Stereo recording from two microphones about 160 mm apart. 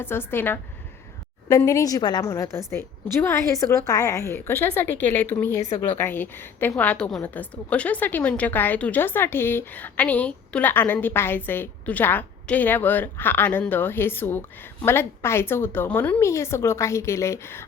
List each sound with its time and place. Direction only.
0.0 s a woman's voice: 15° left (ahead or behind)